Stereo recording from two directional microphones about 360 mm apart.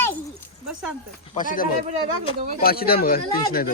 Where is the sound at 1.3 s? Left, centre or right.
Left.